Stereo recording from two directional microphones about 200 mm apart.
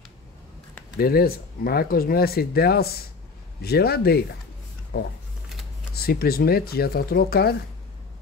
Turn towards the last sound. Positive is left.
turn(degrees=50)  # may be behind; listen again after turning